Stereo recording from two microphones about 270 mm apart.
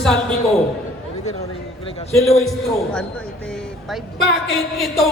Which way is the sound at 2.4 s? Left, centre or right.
Centre.